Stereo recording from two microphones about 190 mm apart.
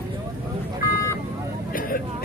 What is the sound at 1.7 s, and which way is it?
Vehicle, 50° left (ahead or behind).